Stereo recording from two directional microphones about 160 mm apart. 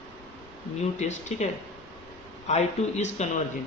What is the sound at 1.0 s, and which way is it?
Speech, 45° left (ahead or behind).